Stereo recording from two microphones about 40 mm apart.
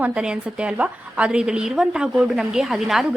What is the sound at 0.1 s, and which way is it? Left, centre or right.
A woman's voice, right.